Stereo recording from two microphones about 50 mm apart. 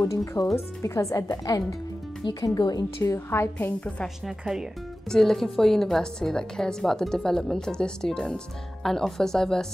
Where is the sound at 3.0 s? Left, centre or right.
Left.